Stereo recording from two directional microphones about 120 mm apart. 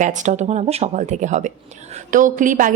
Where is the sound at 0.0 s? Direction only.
90° right.